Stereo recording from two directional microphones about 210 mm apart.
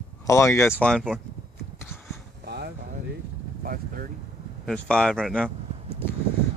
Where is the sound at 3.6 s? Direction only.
40° right (ahead or behind).